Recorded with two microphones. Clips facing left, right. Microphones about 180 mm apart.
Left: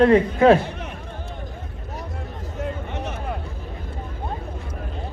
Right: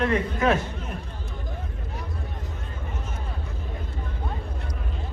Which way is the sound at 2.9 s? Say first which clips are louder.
Left 7 dB; 70° left (ahead or behind).